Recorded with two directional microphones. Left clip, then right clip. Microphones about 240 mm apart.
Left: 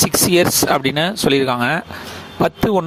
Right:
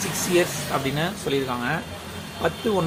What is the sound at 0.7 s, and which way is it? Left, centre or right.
Speech, left.